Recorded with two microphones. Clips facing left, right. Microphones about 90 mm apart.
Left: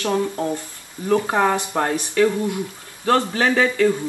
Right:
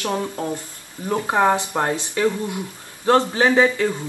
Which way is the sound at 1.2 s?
20° right (ahead or behind).